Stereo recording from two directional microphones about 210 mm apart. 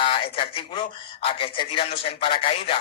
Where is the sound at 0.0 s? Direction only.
25° left (ahead or behind).